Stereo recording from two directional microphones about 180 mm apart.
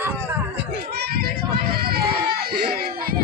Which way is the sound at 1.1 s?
60° right (ahead or behind).